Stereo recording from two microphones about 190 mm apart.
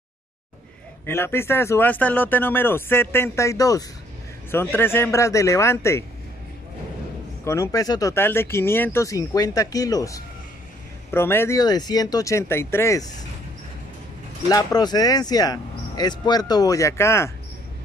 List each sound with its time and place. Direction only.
1.0 s speech: 10° left (ahead or behind)
7.4 s speech: 15° left (ahead or behind)
14.5 s speech: 20° left (ahead or behind)